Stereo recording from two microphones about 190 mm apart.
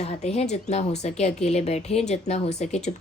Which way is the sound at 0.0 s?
35° left (ahead or behind).